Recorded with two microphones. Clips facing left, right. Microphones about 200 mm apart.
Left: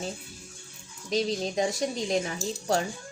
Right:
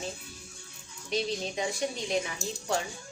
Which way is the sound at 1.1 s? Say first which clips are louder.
Left 4 dB; 40° left (ahead or behind).